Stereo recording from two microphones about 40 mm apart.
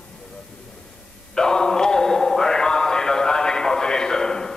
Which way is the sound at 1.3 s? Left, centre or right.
Centre.